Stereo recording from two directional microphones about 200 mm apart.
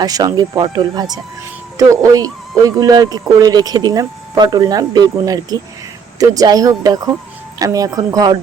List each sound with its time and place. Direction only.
0.0 s speech: 20° right (ahead or behind)